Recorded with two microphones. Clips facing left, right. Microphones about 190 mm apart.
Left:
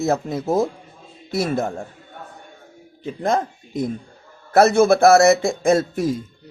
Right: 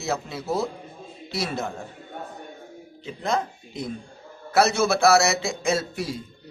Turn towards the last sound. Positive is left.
turn(degrees=50)  # may be behind; listen again after turning